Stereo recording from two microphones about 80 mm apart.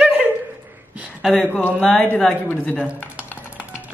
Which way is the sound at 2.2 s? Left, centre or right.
Left.